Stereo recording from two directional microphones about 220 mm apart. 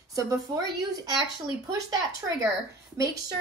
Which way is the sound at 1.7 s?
15° right (ahead or behind).